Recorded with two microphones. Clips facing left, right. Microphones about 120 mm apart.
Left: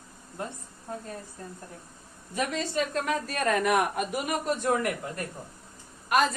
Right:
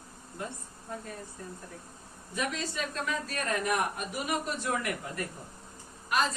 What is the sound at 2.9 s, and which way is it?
Speech, 60° left (ahead or behind).